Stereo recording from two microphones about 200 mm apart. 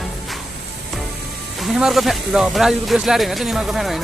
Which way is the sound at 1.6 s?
Centre (ahead or behind).